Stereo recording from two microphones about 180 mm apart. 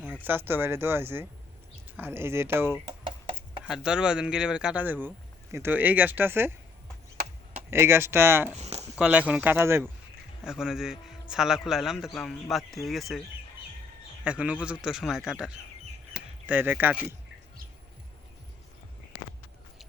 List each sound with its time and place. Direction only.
0.3 s speech: 10° right (ahead or behind)
2.8 s a sound: 30° right (ahead or behind)
3.6 s speech: 5° right (ahead or behind)
7.7 s speech: 15° right (ahead or behind)
8.5 s speech: 35° right (ahead or behind)
9.0 s a man's voice: 5° right (ahead or behind)
14.3 s a man's voice: 5° right (ahead or behind)